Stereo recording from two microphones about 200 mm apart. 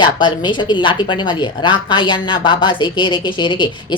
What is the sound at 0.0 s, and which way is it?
A woman's voice, 25° left (ahead or behind).